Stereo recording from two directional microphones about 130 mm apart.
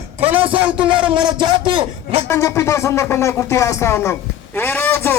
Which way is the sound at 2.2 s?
20° left (ahead or behind).